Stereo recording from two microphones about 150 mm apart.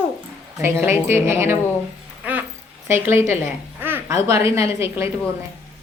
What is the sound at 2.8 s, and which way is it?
A woman's voice, 15° right (ahead or behind).